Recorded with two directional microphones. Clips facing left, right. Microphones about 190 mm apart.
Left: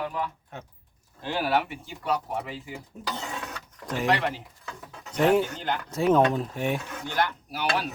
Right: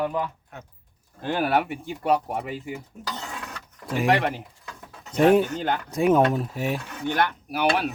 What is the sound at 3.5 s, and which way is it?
Vehicle, 10° right (ahead or behind).